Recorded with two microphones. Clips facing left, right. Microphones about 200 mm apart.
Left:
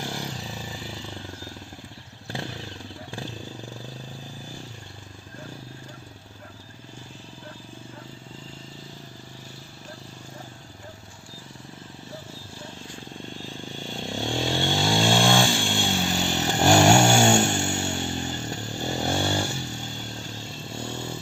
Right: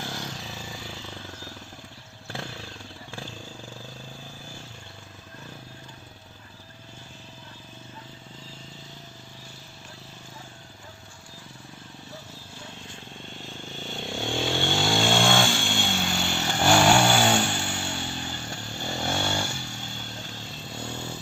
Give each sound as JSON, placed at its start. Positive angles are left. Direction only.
{"t": 0.1, "sound": "vehicle", "side_deg": 30}
{"t": 3.1, "sound": "vehicle", "side_deg": 15}
{"t": 14.0, "sound": "vehicle", "side_deg": 35}
{"t": 14.3, "sound": "vehicle", "side_deg": 0}
{"t": 14.5, "sound": "vehicle", "side_deg": 35}
{"t": 17.0, "sound": "music", "side_deg": 25}
{"t": 17.4, "sound": "music", "side_deg": 45}
{"t": 18.1, "sound": "a sound", "side_deg": 45}
{"t": 20.4, "sound": "vehicle", "side_deg": 0}